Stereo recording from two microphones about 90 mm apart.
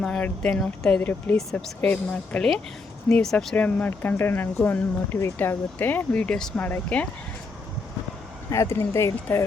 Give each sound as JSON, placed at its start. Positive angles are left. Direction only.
{"t": 0.0, "sound": "speech", "side_deg": 10}
{"t": 3.5, "sound": "speech", "side_deg": 20}
{"t": 8.4, "sound": "speech", "side_deg": 35}